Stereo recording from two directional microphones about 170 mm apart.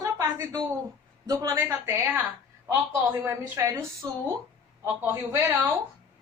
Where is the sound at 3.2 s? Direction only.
15° right (ahead or behind).